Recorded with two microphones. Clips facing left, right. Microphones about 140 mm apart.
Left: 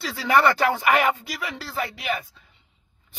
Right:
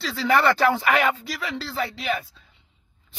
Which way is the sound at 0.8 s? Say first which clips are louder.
Left 1 dB; 15° left (ahead or behind).